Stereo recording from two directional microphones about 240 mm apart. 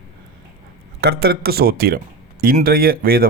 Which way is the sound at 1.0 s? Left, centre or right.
Right.